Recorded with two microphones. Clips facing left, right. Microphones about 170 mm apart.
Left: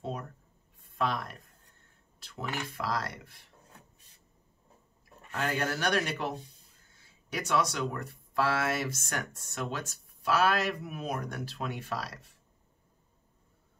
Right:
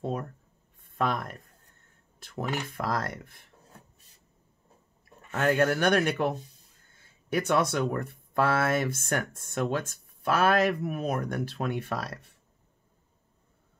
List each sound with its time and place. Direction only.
0.8 s a sound: 50° right (ahead or behind)
2.1 s speech: 50° right (ahead or behind)
5.4 s speech: 50° right (ahead or behind)